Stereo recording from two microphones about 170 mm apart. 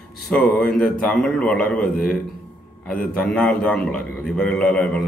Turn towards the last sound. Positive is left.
turn(degrees=5)  # may be behind; listen again after turning